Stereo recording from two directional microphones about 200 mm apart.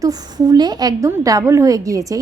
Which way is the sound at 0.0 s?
20° right (ahead or behind).